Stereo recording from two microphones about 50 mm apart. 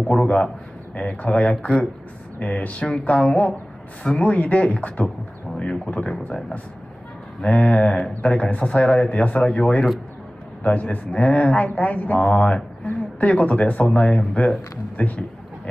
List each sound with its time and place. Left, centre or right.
0.1 s speech: left
7.4 s a man's voice: left
14.0 s a man's voice: centre